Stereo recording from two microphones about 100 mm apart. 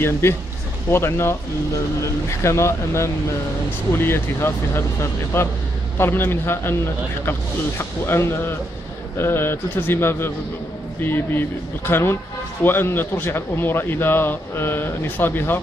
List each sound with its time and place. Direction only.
0.0 s speech: 25° left (ahead or behind)